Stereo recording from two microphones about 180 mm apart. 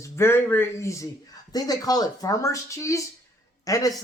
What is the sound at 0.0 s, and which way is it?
A woman's voice, 15° left (ahead or behind).